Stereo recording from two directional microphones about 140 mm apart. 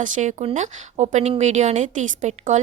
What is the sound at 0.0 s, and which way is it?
Speech, 60° right (ahead or behind).